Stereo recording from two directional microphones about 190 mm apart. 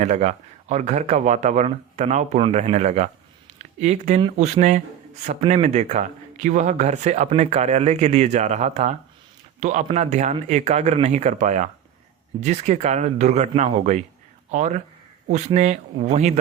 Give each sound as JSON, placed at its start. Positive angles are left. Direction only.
{"t": 0.0, "sound": "speech", "side_deg": -35}